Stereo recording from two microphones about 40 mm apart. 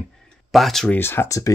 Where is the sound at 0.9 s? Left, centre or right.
Left.